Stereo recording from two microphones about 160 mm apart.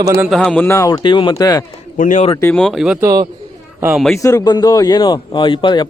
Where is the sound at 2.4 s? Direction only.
10° left (ahead or behind).